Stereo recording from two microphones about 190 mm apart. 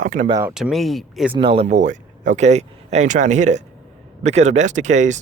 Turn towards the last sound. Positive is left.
turn(degrees=-40)  # may be behind; listen again after turning